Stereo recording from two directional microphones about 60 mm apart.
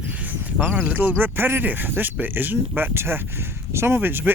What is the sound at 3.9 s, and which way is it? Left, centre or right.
Speech, right.